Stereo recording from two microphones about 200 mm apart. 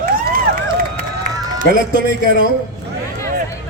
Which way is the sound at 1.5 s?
45° right (ahead or behind).